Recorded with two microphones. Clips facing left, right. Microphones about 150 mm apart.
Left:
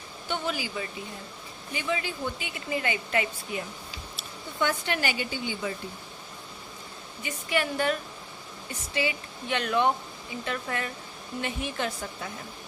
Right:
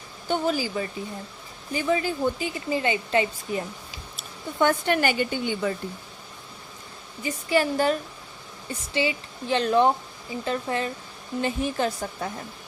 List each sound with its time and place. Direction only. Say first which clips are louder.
0.3 s speech: right 7 dB; 40° right (ahead or behind)
2.6 s a woman's voice: right 5 dB; 30° right (ahead or behind)
4.2 s speech: right 6 dB; 50° right (ahead or behind)
7.2 s a woman's voice: right 6 dB; 35° right (ahead or behind)